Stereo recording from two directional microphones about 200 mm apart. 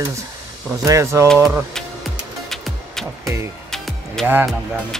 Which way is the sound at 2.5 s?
Centre (ahead or behind).